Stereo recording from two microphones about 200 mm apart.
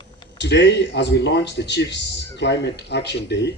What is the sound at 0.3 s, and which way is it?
A man's voice, 60° left (ahead or behind).